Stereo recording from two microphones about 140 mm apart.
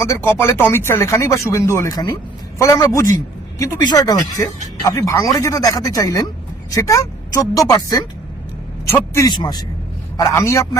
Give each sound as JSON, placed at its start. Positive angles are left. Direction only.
{"t": 0.0, "sound": "speech", "side_deg": 15}
{"t": 10.2, "sound": "speech", "side_deg": 20}